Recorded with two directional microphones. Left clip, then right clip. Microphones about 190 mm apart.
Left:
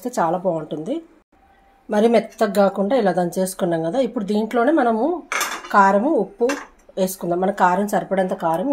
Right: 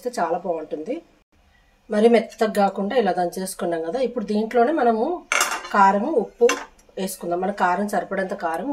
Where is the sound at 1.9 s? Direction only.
40° left (ahead or behind).